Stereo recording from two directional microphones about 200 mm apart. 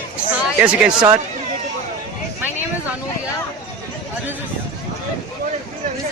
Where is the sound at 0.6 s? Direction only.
5° right (ahead or behind).